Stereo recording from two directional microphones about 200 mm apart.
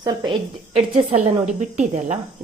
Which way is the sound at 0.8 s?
35° right (ahead or behind).